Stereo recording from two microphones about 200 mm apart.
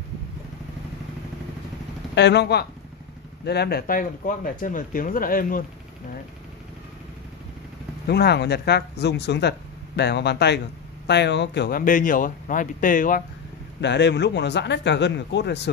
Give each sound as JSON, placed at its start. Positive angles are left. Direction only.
{"t": 2.1, "sound": "speech", "side_deg": 60}
{"t": 8.1, "sound": "speech", "side_deg": 55}
{"t": 13.7, "sound": "speech", "side_deg": 60}